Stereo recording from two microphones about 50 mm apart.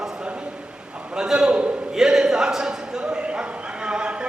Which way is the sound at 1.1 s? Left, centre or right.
Centre.